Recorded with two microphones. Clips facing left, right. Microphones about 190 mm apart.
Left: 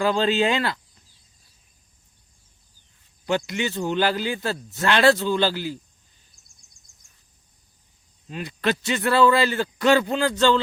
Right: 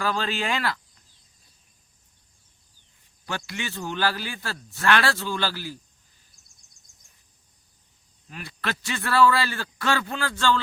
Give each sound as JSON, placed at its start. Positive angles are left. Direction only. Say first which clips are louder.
{"t": 0.0, "sound": "a man's voice", "louder": "left 7 dB", "side_deg": 20}
{"t": 3.2, "sound": "a man's voice", "louder": "left 9 dB", "side_deg": 20}
{"t": 8.3, "sound": "a man's voice", "louder": "left 8 dB", "side_deg": 20}